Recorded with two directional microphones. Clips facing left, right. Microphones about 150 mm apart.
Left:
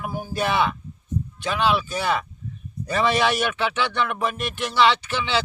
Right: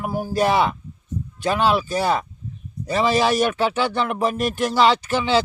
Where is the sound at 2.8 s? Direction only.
30° right (ahead or behind).